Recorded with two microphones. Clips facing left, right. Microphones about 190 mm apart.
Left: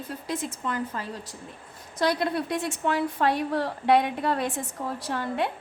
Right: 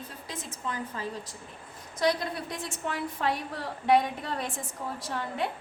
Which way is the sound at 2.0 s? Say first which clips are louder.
Left 3 dB; 65° left (ahead or behind).